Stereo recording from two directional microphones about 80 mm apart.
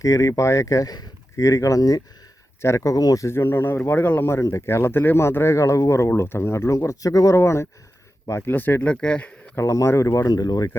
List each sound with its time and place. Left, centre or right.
0.0 s speech: left
2.6 s speech: left
3.2 s speech: left
7.3 s speech: left; by 9.3 s centre
9.6 s speech: left